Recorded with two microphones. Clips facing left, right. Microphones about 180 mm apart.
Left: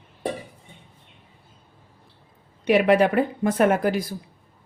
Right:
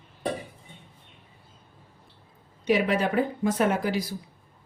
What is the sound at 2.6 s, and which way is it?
Speech, 65° left (ahead or behind).